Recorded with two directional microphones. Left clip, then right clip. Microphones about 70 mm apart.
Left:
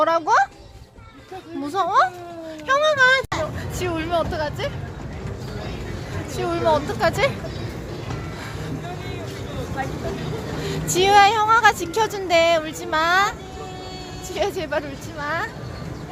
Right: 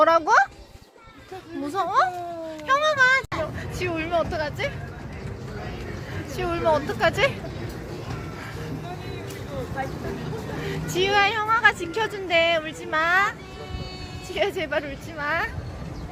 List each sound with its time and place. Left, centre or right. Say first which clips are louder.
0.3 s speech: left 3 dB; right
1.7 s speech: left 4 dB; centre
2.8 s a child's voice: left 3 dB; centre
3.8 s speech: left 2 dB; centre
6.3 s speech: left 2 dB; centre
10.6 s speech: left 5 dB; left
14.3 s speech: left 1 dB; centre
15.2 s speech: even; centre